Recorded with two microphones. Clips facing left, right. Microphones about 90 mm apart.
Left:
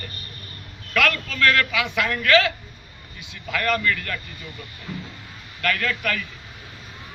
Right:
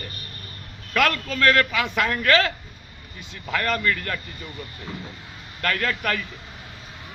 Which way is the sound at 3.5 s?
35° right (ahead or behind).